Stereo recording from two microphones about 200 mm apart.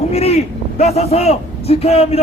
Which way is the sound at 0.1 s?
30° left (ahead or behind).